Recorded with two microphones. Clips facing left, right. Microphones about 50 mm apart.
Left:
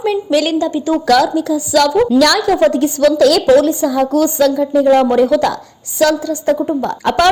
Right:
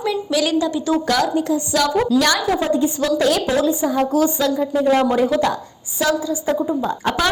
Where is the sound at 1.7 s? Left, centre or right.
Left.